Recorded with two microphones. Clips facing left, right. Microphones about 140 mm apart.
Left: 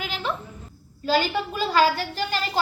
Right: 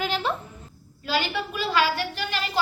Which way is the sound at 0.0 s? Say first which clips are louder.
Right 3 dB; 40° right (ahead or behind).